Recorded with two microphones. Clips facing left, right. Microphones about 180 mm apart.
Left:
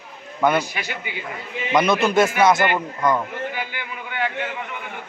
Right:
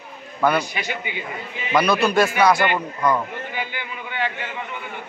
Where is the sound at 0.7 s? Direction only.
5° left (ahead or behind).